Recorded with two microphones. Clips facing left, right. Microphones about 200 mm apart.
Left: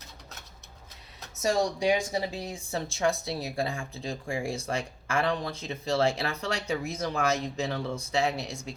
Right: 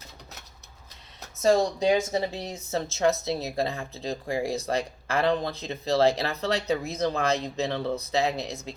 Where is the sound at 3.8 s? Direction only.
35° right (ahead or behind).